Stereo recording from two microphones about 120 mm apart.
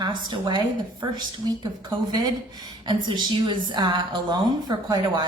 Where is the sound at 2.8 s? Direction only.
40° right (ahead or behind).